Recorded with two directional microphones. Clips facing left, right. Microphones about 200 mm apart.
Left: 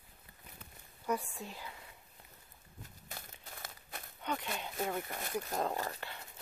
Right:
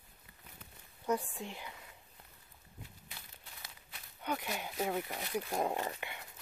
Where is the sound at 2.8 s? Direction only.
45° left (ahead or behind).